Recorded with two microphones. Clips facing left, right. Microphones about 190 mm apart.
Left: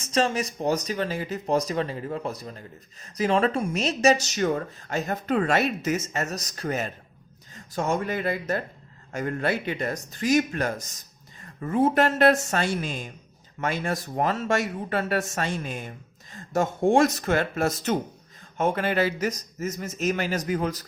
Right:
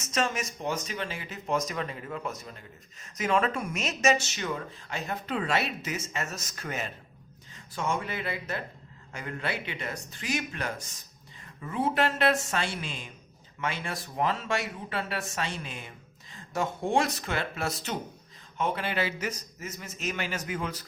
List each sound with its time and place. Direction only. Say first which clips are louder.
0.0 s speech: left 6 dB; 30° left (ahead or behind)